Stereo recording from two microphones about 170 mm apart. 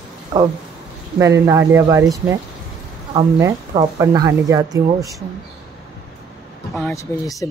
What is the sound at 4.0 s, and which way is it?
Speech, 20° right (ahead or behind).